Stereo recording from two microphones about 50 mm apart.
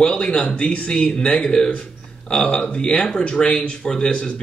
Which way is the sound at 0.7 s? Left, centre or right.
Left.